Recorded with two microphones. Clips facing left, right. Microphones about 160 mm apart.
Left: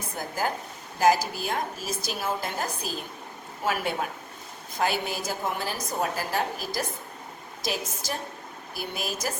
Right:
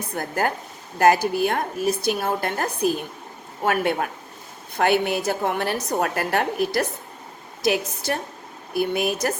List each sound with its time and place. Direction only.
0.2 s a woman's voice: 60° right (ahead or behind)